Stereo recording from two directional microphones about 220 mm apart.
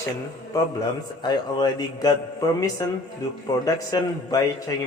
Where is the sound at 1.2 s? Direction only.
20° left (ahead or behind).